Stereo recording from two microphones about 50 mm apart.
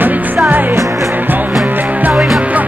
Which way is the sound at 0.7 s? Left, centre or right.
Right.